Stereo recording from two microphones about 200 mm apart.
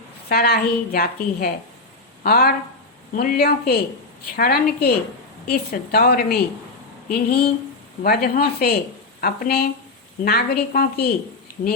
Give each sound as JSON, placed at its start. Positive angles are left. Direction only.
{"t": 0.3, "sound": "a woman's voice", "side_deg": 50}